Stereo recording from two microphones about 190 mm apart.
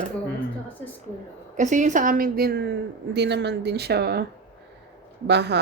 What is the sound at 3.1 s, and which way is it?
Speech, 65° right (ahead or behind).